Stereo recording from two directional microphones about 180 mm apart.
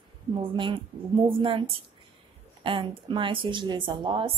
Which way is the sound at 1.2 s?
30° right (ahead or behind).